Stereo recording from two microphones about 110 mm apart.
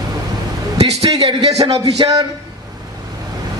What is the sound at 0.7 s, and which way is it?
Speech, 65° right (ahead or behind).